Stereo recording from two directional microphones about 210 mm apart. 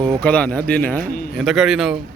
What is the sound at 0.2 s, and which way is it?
A man's voice, 5° left (ahead or behind).